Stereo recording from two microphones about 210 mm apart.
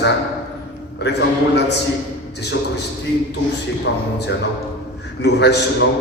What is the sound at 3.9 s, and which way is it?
A man's voice, 55° left (ahead or behind).